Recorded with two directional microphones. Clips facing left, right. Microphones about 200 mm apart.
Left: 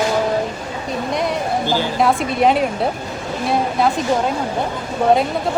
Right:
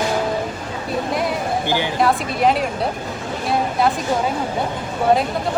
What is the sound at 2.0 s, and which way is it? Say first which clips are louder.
A woman's voice: left 3 dB; centre (ahead or behind).